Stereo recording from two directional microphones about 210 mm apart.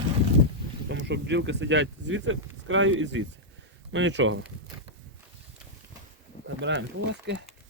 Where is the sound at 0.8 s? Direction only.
60° right (ahead or behind).